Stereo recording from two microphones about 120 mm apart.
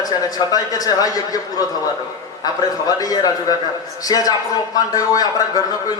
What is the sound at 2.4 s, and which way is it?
A man's voice, 30° left (ahead or behind).